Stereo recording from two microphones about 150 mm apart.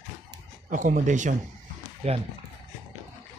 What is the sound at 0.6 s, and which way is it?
Speech, 60° right (ahead or behind).